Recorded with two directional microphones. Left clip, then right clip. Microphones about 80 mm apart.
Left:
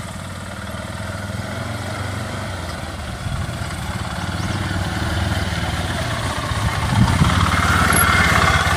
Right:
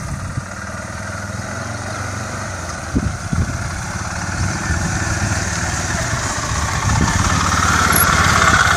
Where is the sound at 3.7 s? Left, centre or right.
Centre.